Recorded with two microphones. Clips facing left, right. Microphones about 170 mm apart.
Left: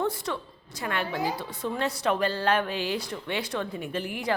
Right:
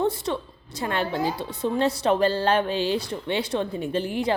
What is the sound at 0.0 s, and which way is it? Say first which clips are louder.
A woman's voice: right 4 dB; 25° right (ahead or behind).